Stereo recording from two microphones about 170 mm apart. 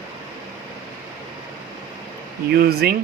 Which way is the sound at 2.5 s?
65° right (ahead or behind).